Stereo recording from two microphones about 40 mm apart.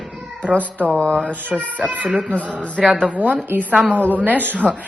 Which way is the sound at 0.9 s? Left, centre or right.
Left.